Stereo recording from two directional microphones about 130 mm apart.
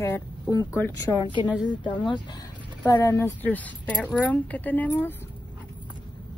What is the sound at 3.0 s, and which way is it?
Speech, 20° left (ahead or behind).